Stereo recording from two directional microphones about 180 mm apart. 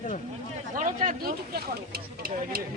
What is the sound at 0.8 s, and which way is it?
Speech, 45° right (ahead or behind).